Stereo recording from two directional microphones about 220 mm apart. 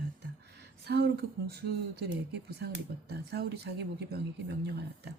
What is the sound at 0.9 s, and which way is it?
Speech, 50° right (ahead or behind).